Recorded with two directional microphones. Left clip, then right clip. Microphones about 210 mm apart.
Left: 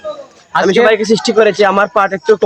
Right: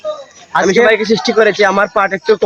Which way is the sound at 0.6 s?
10° left (ahead or behind).